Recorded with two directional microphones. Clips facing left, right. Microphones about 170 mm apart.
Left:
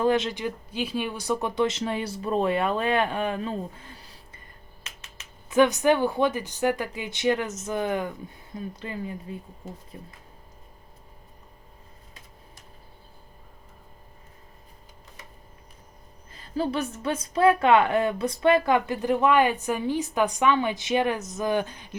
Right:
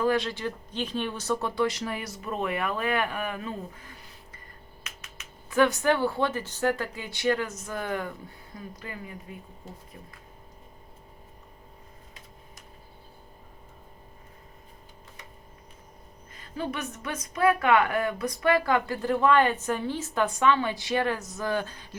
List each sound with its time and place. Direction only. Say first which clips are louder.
0.0 s speech: left 2 dB; 20° left (ahead or behind)
16.3 s speech: left 6 dB; 30° left (ahead or behind)